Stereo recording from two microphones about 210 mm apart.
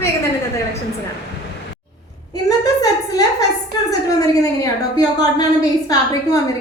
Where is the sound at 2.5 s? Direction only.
15° left (ahead or behind).